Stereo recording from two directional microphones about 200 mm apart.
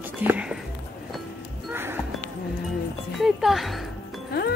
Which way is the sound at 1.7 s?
10° right (ahead or behind).